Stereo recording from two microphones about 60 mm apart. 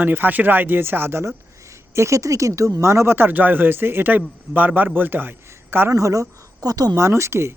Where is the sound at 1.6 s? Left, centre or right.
Right.